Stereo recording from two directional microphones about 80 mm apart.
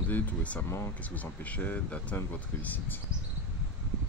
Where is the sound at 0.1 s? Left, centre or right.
Centre.